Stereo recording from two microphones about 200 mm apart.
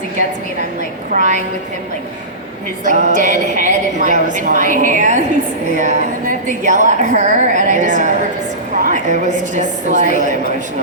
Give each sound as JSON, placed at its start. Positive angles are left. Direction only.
{"t": 1.1, "sound": "a woman's voice", "side_deg": -35}
{"t": 2.8, "sound": "a woman's voice", "side_deg": -40}